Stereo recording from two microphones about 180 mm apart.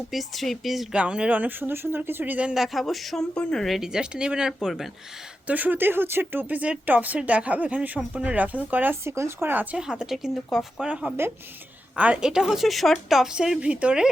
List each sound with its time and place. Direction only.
0.1 s a woman's voice: centre (ahead or behind)